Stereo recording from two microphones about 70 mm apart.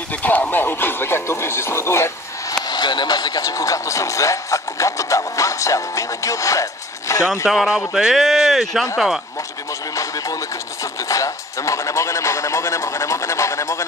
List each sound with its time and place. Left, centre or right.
0.1 s speech: left
2.7 s speech: left
3.4 s speech: left
7.4 s speech: centre
9.9 s a sound: left